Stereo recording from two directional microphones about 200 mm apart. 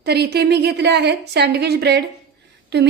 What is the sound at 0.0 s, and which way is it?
A woman's voice, 55° right (ahead or behind).